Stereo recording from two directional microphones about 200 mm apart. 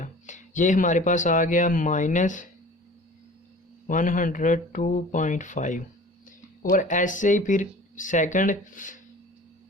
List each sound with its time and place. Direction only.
0.0 s speech: 40° left (ahead or behind)
3.8 s speech: 40° left (ahead or behind)